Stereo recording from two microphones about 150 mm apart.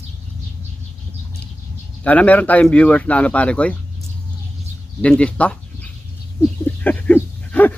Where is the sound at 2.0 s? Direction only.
10° left (ahead or behind).